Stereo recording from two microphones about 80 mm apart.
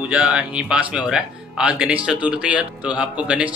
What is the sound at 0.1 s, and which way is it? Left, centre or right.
Speech, centre.